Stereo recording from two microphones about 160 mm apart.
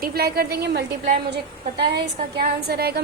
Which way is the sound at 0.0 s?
75° right (ahead or behind).